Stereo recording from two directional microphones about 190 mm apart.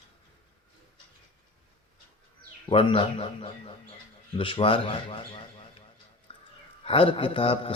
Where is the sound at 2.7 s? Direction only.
30° left (ahead or behind).